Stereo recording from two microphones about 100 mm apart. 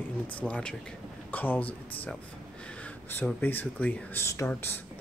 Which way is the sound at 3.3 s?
15° left (ahead or behind).